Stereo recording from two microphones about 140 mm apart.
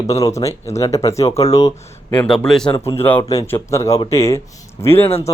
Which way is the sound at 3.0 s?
15° left (ahead or behind).